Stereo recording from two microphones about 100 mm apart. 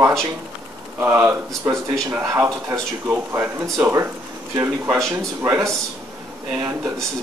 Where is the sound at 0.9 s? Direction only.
25° right (ahead or behind).